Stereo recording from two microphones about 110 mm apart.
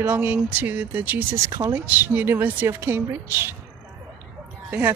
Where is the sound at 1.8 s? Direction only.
15° right (ahead or behind).